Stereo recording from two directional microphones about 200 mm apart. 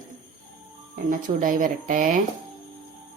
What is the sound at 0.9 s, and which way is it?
Speech, 40° right (ahead or behind).